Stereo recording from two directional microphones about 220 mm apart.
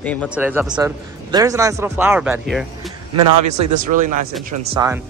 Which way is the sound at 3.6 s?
35° right (ahead or behind).